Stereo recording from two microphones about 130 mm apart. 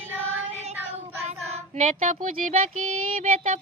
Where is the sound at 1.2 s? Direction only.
60° right (ahead or behind); by 2.5 s 80° right.